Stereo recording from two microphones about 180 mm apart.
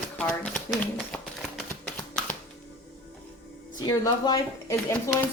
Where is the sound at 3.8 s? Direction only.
20° left (ahead or behind).